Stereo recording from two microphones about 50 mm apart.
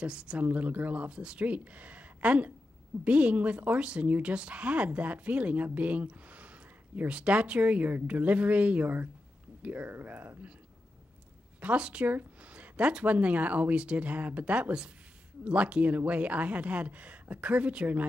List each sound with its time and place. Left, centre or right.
0.0 s speech: centre
0.4 s a woman's voice: right
11.6 s a woman's voice: right